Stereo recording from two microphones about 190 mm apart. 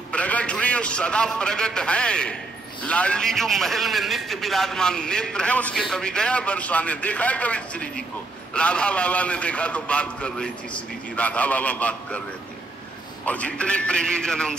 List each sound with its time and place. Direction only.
0.1 s a man's voice: 5° left (ahead or behind)
13.2 s a man's voice: 5° left (ahead or behind)